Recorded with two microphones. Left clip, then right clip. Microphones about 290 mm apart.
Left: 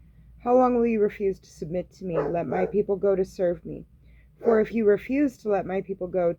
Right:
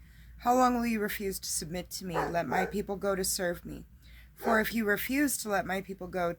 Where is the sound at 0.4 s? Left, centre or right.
Centre.